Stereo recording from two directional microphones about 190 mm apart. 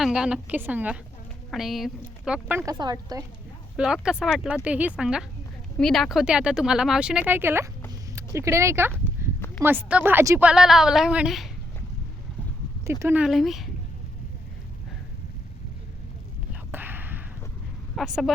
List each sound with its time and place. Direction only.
0.0 s speech: 5° right (ahead or behind); by 3.2 s 20° right (ahead or behind)
3.8 s speech: 5° right (ahead or behind)
9.2 s a sound: 15° right (ahead or behind)
9.6 s speech: 10° right (ahead or behind)
10.5 s speech: centre (ahead or behind)
12.8 s speech: 15° right (ahead or behind)
16.5 s whispering: 10° right (ahead or behind)
17.9 s speech: centre (ahead or behind)